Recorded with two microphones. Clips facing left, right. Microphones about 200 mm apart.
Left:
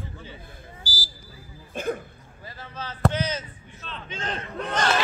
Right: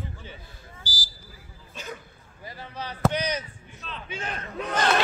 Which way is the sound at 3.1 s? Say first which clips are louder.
Even; 15° right (ahead or behind).